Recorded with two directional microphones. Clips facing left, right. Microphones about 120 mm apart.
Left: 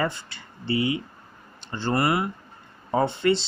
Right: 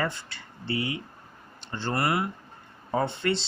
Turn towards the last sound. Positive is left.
turn(degrees=15)  # may be behind; listen again after turning